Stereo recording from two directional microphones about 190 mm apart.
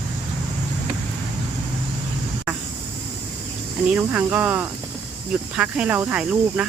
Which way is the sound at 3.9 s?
10° right (ahead or behind).